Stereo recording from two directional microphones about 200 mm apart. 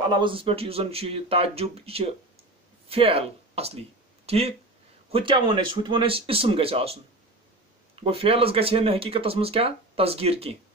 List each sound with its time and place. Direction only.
0.1 s speech: 25° right (ahead or behind)